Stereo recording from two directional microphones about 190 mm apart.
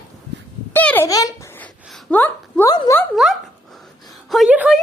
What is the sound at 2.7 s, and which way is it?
Speech, 20° left (ahead or behind).